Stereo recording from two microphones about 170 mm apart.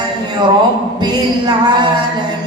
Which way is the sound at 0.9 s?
25° right (ahead or behind).